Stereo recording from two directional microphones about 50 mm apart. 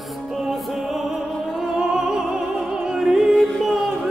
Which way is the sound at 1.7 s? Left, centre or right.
Centre.